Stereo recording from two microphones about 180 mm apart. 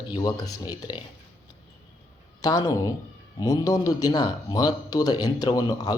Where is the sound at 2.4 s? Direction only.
20° left (ahead or behind).